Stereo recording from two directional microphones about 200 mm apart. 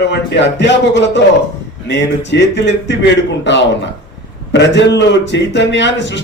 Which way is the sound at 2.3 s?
60° left (ahead or behind).